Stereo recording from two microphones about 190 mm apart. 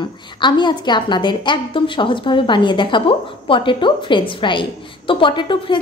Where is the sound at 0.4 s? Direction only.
25° left (ahead or behind).